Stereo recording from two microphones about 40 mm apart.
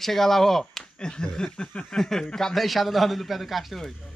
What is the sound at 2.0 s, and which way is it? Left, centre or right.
Speech, centre.